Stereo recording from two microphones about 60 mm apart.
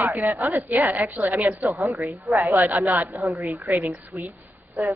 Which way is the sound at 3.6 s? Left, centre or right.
Right.